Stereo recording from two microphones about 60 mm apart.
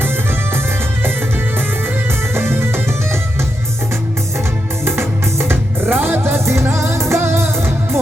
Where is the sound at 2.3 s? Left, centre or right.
Right.